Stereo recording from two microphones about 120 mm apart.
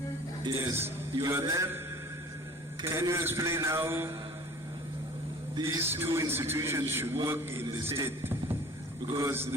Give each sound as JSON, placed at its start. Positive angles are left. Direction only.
{"t": 0.6, "sound": "a man's voice", "side_deg": -20}
{"t": 2.8, "sound": "a man's voice", "side_deg": -20}
{"t": 5.6, "sound": "a man's voice", "side_deg": -20}